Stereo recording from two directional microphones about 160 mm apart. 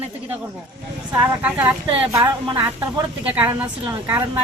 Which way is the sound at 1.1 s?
10° right (ahead or behind).